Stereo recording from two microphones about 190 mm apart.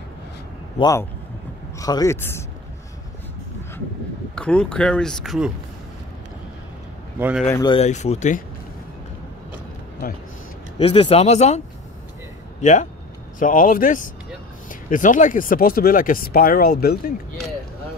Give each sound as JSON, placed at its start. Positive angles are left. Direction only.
{"t": 0.7, "sound": "a man's voice", "side_deg": 20}
{"t": 4.4, "sound": "speech", "side_deg": 5}
{"t": 7.2, "sound": "speech", "side_deg": -10}
{"t": 7.5, "sound": "speech", "side_deg": 25}
{"t": 7.8, "sound": "speech", "side_deg": 35}
{"t": 10.8, "sound": "speech", "side_deg": 30}